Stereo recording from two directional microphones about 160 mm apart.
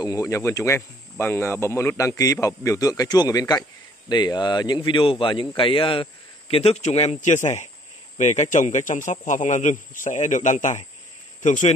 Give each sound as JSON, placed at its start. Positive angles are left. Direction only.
{"t": 0.0, "sound": "speech", "side_deg": 20}